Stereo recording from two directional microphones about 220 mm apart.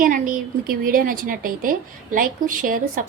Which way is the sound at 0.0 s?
40° right (ahead or behind).